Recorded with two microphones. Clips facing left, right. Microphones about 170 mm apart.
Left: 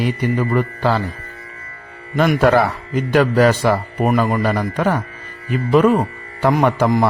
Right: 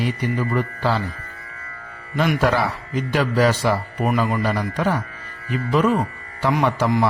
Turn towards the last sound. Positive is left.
turn(degrees=50)  # may be behind; listen again after turning